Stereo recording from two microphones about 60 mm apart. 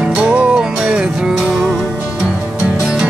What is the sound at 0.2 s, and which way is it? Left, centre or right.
Music, centre.